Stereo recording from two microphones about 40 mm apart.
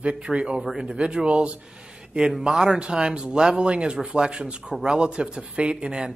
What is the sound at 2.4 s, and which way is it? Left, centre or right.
Speech, centre.